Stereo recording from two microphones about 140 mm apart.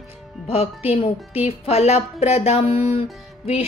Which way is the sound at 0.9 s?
45° left (ahead or behind).